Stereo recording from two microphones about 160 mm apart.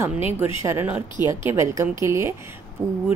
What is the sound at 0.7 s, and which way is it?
A woman's voice, 15° right (ahead or behind).